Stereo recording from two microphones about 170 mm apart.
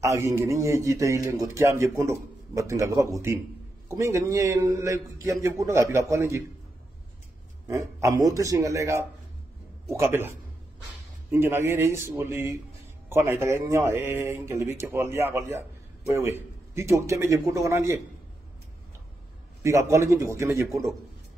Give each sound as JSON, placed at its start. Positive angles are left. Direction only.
{"t": 0.0, "sound": "a man's voice", "side_deg": -20}
{"t": 7.6, "sound": "a man's voice", "side_deg": -15}
{"t": 19.6, "sound": "a man's voice", "side_deg": -15}